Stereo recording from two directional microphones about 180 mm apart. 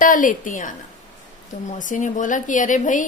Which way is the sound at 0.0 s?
50° left (ahead or behind).